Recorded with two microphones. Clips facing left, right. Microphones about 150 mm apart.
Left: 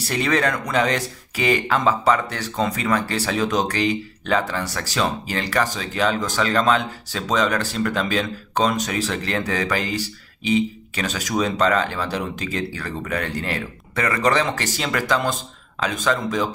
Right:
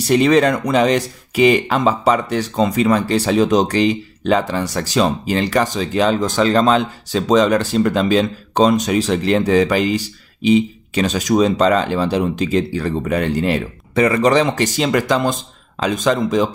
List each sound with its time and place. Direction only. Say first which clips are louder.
0.1 s speech: right 9 dB; 20° right (ahead or behind)